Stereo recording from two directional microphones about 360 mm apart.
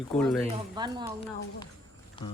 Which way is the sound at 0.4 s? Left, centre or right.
Centre.